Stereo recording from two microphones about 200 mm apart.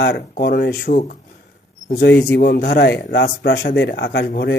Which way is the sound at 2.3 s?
50° left (ahead or behind).